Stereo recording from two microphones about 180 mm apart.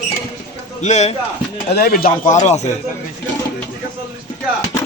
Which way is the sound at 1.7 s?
55° left (ahead or behind).